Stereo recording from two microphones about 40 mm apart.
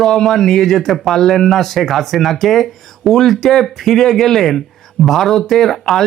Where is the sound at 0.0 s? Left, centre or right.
Centre.